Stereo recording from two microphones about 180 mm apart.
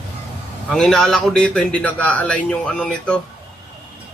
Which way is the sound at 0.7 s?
Centre (ahead or behind).